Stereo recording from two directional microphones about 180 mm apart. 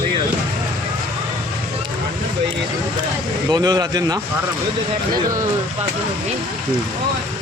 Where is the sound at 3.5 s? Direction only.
20° right (ahead or behind).